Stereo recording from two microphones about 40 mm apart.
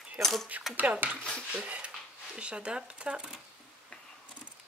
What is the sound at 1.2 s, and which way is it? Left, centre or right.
Speech, left.